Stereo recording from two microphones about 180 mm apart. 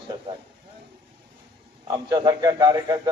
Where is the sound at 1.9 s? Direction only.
20° right (ahead or behind).